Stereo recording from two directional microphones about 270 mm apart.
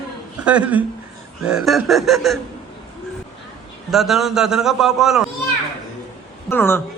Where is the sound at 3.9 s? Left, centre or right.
Centre.